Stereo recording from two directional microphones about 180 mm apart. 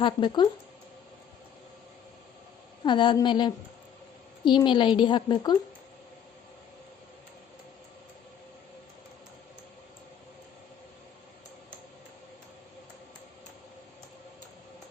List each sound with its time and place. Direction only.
0.0 s a woman's voice: 25° left (ahead or behind)
2.8 s a woman's voice: 25° left (ahead or behind)